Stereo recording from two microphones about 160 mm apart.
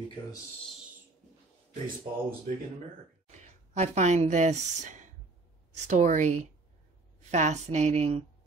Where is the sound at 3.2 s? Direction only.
45° right (ahead or behind).